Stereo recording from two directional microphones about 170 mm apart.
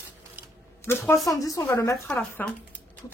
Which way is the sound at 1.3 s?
20° left (ahead or behind).